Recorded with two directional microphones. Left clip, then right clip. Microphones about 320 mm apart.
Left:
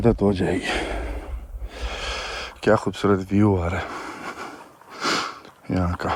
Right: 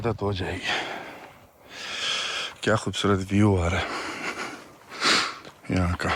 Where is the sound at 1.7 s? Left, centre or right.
Centre.